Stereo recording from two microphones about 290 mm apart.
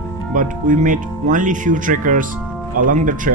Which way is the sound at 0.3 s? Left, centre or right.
Right.